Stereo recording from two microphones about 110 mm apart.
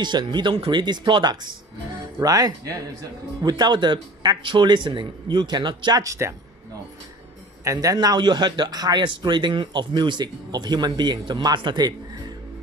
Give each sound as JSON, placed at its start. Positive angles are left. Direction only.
{"t": 0.0, "sound": "a man's voice", "side_deg": -45}
{"t": 7.6, "sound": "a man's voice", "side_deg": -30}